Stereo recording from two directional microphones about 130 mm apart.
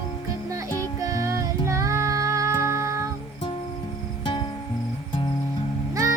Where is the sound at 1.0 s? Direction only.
25° right (ahead or behind).